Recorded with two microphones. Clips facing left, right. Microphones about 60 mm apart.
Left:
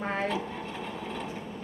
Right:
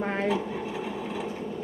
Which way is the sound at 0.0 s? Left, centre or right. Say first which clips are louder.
Right 3 dB; centre.